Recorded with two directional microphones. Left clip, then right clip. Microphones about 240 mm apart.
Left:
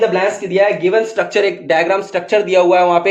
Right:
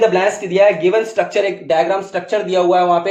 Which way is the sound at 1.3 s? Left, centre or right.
Left.